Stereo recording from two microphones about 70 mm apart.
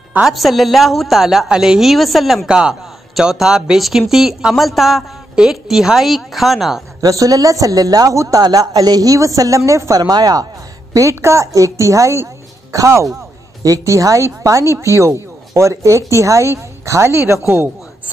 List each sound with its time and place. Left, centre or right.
0.2 s a woman's voice: centre
2.4 s a woman's voice: centre
7.0 s speech: right
8.4 s speech: right
10.9 s a woman's voice: right